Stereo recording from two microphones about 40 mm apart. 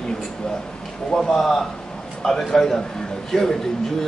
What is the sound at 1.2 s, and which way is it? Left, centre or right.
A man's voice, centre.